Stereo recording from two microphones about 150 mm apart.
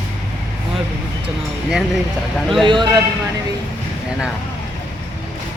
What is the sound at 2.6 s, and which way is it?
Speech, 30° right (ahead or behind).